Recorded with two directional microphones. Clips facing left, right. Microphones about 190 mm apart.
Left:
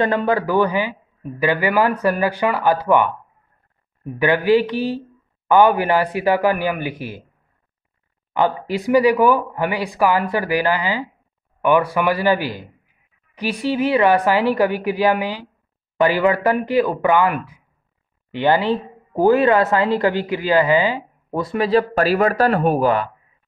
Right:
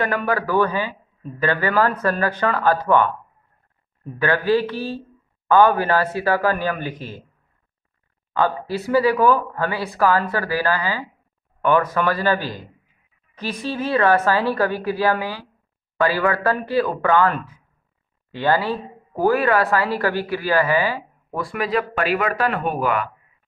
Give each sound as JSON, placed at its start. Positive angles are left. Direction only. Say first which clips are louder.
{"t": 0.0, "sound": "a man's voice", "louder": "left 4 dB", "side_deg": 20}
{"t": 8.3, "sound": "a man's voice", "louder": "left 2 dB", "side_deg": 15}